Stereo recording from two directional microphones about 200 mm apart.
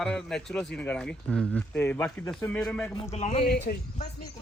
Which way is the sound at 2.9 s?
30° left (ahead or behind).